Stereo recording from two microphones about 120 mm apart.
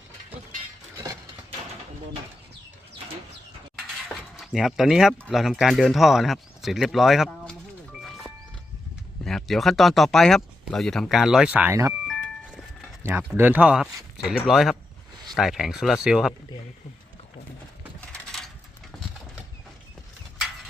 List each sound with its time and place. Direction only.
4.1 s a sound: centre (ahead or behind)
5.3 s speech: 5° right (ahead or behind)
8.0 s music: centre (ahead or behind)
9.2 s speech: centre (ahead or behind)
11.7 s speech: 25° right (ahead or behind)
12.0 s music: 5° left (ahead or behind)
13.0 s speech: 20° right (ahead or behind)
18.1 s a sound: 5° left (ahead or behind)